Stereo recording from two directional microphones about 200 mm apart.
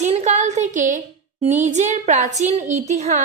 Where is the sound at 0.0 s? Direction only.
35° right (ahead or behind).